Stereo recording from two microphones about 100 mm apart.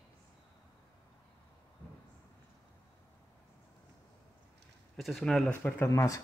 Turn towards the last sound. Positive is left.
turn(degrees=30)  # may be behind; listen again after turning